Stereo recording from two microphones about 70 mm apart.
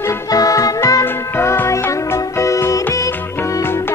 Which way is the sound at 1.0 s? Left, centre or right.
Left.